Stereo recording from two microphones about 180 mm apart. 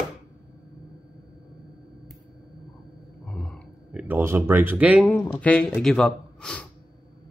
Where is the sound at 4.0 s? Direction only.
10° right (ahead or behind).